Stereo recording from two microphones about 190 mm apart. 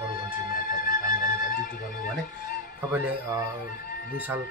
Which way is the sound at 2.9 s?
20° right (ahead or behind).